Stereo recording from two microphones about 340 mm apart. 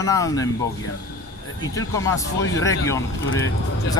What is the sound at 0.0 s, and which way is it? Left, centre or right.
Speech, centre.